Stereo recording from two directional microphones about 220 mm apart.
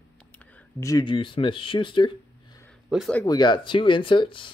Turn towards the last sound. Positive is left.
turn(degrees=20)  # may be behind; listen again after turning